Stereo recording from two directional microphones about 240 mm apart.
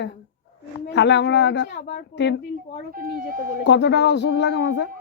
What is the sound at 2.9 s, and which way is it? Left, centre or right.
Speech, right.